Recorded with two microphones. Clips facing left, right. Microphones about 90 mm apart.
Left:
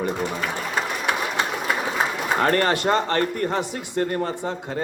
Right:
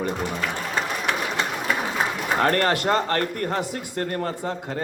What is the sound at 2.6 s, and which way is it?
Speech, 25° left (ahead or behind).